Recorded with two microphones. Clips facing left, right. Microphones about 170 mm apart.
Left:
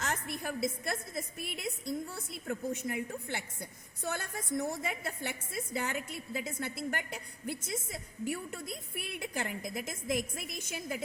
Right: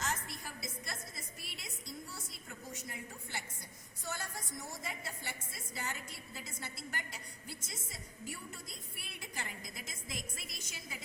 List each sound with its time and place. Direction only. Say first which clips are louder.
0.0 s a woman's voice: left 5 dB; 60° left (ahead or behind)